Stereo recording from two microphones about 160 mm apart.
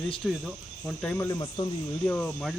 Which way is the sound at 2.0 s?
5° left (ahead or behind).